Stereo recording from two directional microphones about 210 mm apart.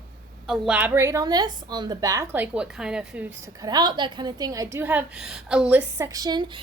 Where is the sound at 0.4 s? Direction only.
Centre (ahead or behind).